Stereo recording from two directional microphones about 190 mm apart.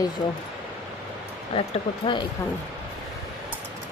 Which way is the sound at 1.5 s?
25° left (ahead or behind).